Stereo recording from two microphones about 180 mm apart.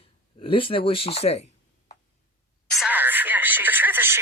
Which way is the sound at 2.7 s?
5° right (ahead or behind).